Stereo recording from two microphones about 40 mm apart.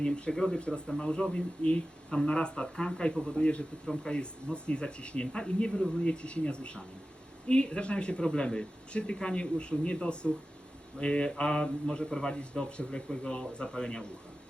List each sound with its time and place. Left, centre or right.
0.0 s speech: left